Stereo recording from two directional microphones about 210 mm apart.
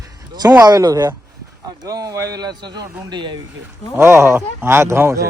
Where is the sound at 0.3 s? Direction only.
15° right (ahead or behind).